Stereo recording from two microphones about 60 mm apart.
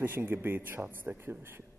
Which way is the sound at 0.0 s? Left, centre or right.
Right.